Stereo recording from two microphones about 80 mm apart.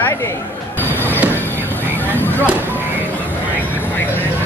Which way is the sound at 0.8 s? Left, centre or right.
Left.